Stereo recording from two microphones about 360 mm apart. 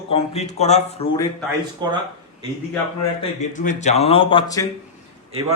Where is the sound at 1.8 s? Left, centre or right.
Centre.